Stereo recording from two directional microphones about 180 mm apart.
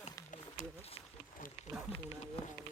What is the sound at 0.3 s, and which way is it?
Run, 45° left (ahead or behind).